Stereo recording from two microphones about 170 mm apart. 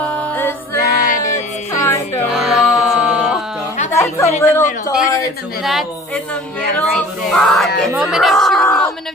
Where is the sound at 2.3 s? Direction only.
Centre (ahead or behind).